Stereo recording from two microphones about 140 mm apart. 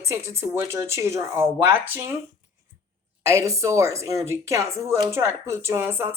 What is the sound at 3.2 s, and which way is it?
A woman's voice, 20° right (ahead or behind).